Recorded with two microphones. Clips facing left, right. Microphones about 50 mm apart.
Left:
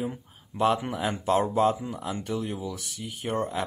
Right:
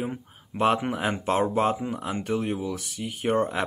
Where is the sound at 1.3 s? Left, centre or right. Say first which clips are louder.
Even; right.